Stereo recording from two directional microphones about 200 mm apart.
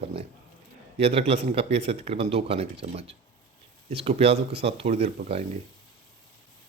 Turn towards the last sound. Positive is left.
turn(degrees=-30)  # may be behind; listen again after turning